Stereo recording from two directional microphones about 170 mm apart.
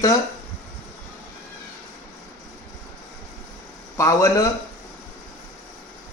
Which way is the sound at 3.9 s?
20° left (ahead or behind).